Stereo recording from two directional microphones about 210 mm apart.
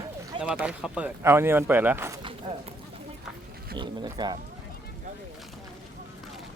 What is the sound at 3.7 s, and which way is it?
Speech, 20° right (ahead or behind).